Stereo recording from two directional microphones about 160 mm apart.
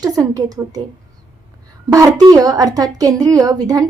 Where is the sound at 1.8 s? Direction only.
20° right (ahead or behind).